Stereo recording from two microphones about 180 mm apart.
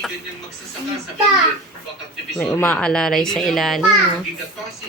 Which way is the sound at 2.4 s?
5° left (ahead or behind).